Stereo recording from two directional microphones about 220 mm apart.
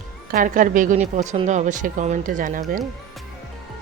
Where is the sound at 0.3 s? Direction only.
40° right (ahead or behind).